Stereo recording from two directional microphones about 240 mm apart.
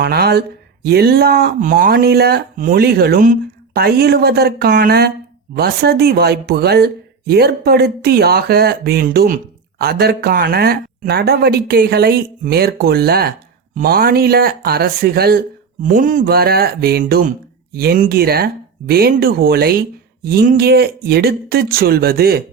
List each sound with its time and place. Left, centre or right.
0.0 s speech: right